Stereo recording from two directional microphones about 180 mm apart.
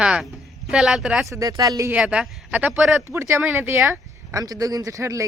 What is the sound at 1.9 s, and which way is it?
Speech, 5° right (ahead or behind).